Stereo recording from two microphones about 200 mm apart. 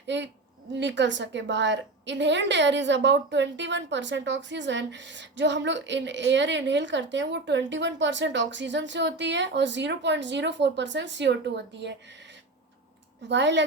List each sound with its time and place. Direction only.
0.8 s a woman's voice: 60° right (ahead or behind)
13.2 s a woman's voice: 60° right (ahead or behind)